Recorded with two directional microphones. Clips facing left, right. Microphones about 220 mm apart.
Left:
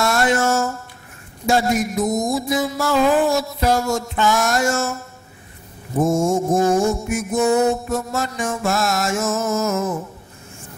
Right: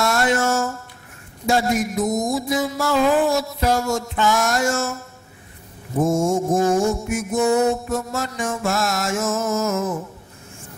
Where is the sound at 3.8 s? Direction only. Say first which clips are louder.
Left 1 dB; 25° left (ahead or behind).